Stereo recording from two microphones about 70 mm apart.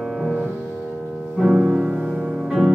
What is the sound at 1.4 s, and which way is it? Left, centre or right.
Music, centre.